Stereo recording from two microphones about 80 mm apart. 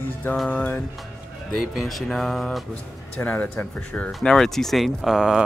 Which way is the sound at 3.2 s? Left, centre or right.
Left.